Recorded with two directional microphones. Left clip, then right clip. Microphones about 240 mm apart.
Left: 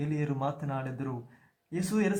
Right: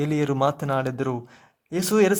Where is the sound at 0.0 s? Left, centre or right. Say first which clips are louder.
Right 11 dB; right.